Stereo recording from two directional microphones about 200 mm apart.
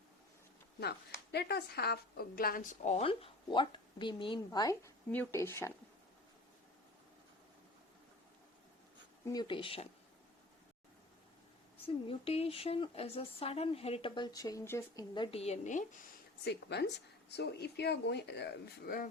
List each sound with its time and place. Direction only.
0.8 s a woman's voice: 55° left (ahead or behind); by 5.7 s 15° left (ahead or behind)
9.2 s a woman's voice: 20° left (ahead or behind)
12.0 s a woman's voice: 30° left (ahead or behind)
16.4 s speech: 55° left (ahead or behind)